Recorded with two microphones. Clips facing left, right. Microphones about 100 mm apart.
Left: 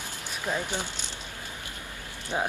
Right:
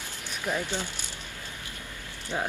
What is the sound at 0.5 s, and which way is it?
Speech, 20° left (ahead or behind).